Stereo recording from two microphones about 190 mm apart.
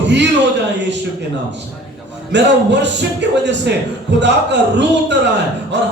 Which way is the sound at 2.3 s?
65° right (ahead or behind).